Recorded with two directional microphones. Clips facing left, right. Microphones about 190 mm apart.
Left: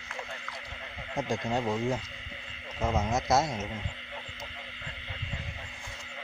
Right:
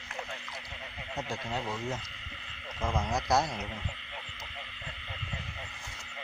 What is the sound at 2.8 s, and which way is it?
Owl, 25° left (ahead or behind).